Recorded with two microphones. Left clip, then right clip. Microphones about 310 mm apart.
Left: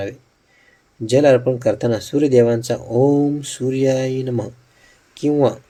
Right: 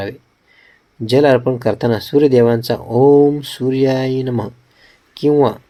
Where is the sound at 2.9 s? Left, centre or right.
Right.